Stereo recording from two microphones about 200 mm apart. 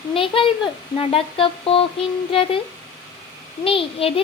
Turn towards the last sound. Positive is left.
turn(degrees=25)  # may be behind; listen again after turning